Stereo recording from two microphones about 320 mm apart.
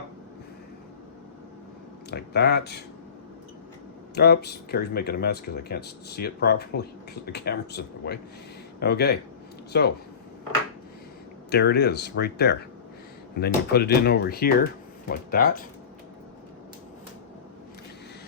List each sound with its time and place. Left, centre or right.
2.0 s speech: left
4.1 s speech: left
11.5 s speech: left